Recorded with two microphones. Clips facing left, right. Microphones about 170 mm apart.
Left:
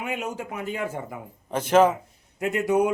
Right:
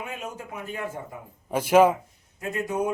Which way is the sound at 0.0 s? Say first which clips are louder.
Left 5 dB; 80° left.